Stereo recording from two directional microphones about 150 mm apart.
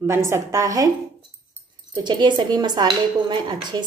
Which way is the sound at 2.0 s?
30° right (ahead or behind).